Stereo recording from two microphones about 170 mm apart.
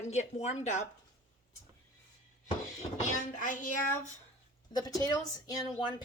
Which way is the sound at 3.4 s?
50° left (ahead or behind).